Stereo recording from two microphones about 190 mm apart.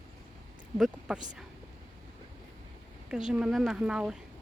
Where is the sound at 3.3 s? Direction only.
5° right (ahead or behind).